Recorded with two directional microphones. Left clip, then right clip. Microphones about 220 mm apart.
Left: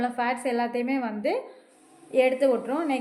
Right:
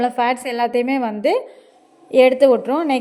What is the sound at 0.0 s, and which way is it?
A woman's voice, 40° right (ahead or behind).